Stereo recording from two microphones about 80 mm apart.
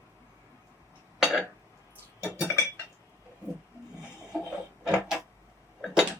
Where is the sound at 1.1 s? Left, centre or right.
Centre.